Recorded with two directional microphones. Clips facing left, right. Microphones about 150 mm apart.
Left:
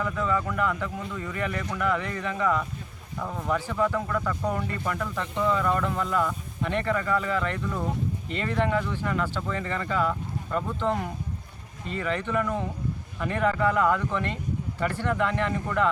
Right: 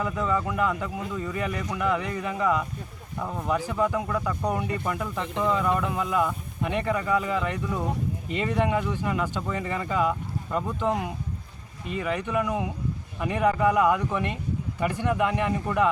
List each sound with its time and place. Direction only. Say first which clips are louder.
0.0 s speech: right 1 dB; 10° right (ahead or behind)